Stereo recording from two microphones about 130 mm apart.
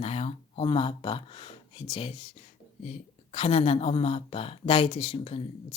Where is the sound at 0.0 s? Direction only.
55° left (ahead or behind).